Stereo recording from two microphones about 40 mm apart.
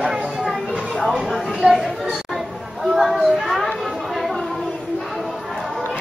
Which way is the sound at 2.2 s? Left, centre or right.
Centre.